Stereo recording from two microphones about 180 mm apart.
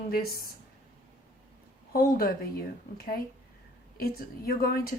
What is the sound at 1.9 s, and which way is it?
Speech, 50° left (ahead or behind).